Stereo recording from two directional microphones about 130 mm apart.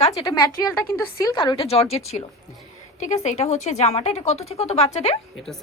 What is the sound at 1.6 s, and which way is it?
Speech, 50° left (ahead or behind).